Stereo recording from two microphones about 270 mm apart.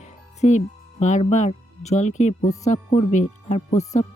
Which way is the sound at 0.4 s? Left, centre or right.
Left.